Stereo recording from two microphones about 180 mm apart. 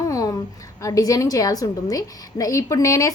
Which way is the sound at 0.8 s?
20° left (ahead or behind).